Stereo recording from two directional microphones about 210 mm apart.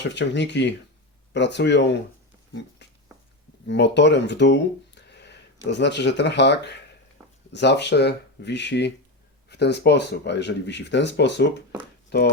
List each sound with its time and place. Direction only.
0.0 s speech: 55° left (ahead or behind)
3.7 s speech: 55° left (ahead or behind)